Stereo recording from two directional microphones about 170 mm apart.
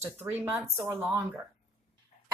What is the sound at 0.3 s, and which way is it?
Speech, 10° right (ahead or behind).